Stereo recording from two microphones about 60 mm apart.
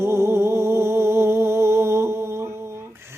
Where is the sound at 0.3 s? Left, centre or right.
Right.